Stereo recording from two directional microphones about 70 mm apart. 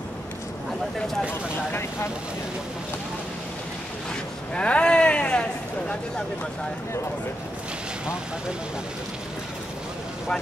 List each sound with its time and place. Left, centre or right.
4.6 s speech: centre